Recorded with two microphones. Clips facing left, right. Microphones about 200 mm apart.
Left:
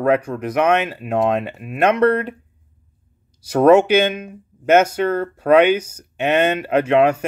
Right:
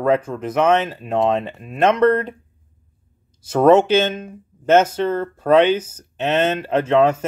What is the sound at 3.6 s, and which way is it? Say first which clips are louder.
Speech: left 1 dB; 10° left (ahead or behind).